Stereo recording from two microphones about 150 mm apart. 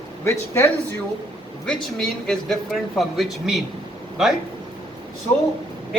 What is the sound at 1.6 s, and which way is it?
Speech, 5° left (ahead or behind).